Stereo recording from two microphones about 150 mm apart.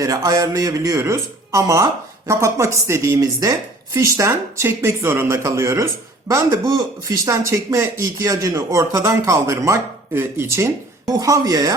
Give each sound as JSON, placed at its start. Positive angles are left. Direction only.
{"t": 0.0, "sound": "speech", "side_deg": -25}